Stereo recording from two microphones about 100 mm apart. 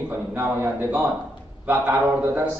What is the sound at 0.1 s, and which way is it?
A man's voice, 25° right (ahead or behind).